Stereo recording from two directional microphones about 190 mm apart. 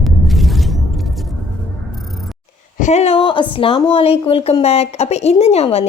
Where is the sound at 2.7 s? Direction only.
40° left (ahead or behind).